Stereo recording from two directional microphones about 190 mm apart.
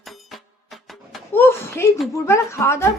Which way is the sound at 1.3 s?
10° left (ahead or behind).